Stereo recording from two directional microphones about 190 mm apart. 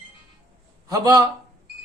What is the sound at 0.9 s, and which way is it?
Speech, 20° right (ahead or behind).